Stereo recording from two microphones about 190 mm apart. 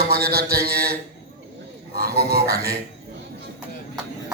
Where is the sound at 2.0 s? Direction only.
55° right (ahead or behind).